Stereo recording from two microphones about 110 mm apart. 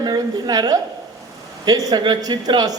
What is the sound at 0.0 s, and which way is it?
A woman's voice, 40° right (ahead or behind).